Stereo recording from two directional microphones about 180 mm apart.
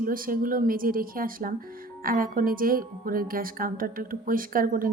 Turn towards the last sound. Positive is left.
turn(degrees=-50)  # may be behind; listen again after turning